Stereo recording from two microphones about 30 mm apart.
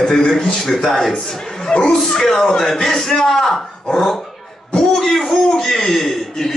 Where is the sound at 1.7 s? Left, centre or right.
Left.